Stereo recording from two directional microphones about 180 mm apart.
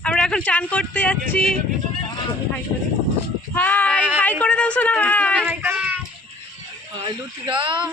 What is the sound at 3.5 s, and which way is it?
Speech, 10° left (ahead or behind).